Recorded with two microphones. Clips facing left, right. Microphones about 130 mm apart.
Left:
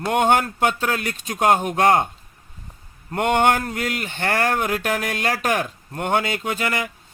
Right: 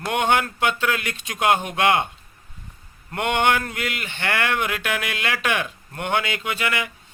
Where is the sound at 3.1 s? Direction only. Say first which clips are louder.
Left 3 dB; 40° left (ahead or behind).